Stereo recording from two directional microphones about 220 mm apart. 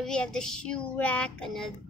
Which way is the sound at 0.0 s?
5° left (ahead or behind).